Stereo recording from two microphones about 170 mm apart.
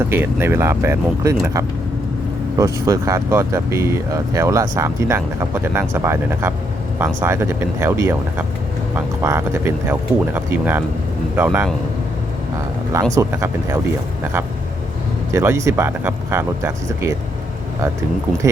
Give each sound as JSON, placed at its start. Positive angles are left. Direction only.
{"t": 0.1, "sound": "speech", "side_deg": -15}
{"t": 13.1, "sound": "speech", "side_deg": -15}
{"t": 15.3, "sound": "speech", "side_deg": -15}